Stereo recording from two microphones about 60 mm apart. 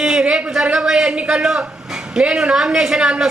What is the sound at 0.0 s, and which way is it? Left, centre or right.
A man's voice, centre.